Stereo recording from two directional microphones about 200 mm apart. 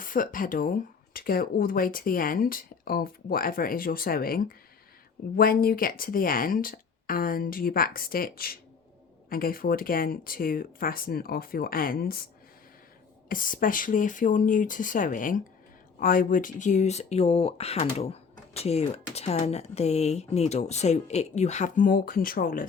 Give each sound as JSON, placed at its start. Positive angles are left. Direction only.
{"t": 0.0, "sound": "speech", "side_deg": 45}
{"t": 13.2, "sound": "speech", "side_deg": 45}